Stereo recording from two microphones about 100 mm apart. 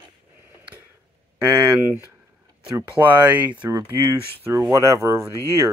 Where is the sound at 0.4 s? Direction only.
20° right (ahead or behind).